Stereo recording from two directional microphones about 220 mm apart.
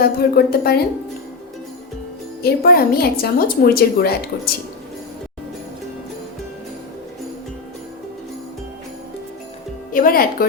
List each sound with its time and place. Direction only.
0.0 s a woman's voice: 45° left (ahead or behind)
2.4 s a woman's voice: 45° left (ahead or behind)
9.9 s speech: 40° left (ahead or behind)